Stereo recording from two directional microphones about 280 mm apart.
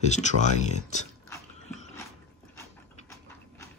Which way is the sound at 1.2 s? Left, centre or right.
Centre.